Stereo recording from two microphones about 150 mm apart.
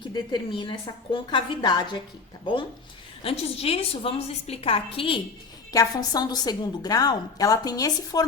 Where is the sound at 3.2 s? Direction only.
40° left (ahead or behind).